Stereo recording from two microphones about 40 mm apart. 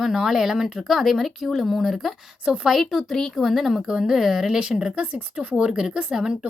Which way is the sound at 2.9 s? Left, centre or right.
Centre.